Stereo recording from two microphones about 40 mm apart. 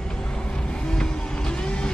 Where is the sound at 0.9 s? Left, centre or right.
Centre.